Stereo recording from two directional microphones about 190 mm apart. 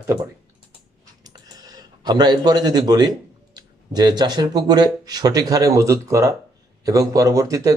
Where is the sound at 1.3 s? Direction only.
20° right (ahead or behind).